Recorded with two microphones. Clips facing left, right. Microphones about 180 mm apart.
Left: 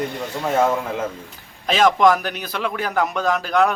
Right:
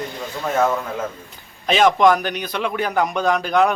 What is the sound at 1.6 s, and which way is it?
A man's voice, centre (ahead or behind).